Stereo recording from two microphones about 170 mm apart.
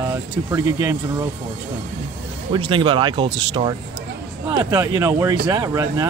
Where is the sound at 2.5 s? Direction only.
30° right (ahead or behind).